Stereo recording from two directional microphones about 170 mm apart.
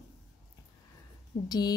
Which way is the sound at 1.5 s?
25° left (ahead or behind).